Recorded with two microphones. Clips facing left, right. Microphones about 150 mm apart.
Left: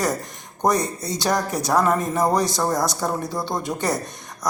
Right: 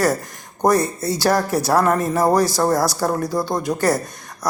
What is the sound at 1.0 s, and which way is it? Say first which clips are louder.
Speech: right 5 dB; 5° right (ahead or behind).